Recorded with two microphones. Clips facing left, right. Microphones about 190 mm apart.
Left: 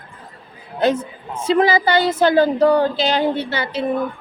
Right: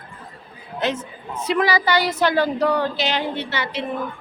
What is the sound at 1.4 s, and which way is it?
A woman's voice, 25° left (ahead or behind).